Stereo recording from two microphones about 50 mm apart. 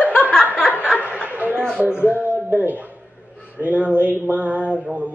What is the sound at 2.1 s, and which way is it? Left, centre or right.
A woman's voice, right.